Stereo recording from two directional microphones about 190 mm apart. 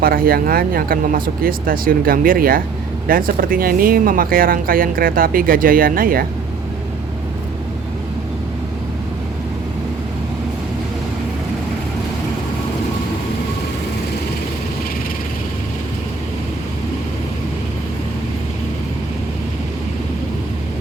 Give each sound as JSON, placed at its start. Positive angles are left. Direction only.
{"t": 0.0, "sound": "speech", "side_deg": -50}